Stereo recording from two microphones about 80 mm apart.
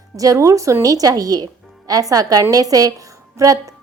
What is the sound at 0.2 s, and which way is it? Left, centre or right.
A woman's voice, right.